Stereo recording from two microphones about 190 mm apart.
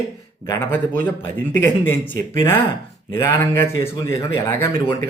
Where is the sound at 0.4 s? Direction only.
10° left (ahead or behind).